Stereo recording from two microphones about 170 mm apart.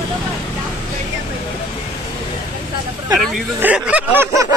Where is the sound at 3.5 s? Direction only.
10° right (ahead or behind).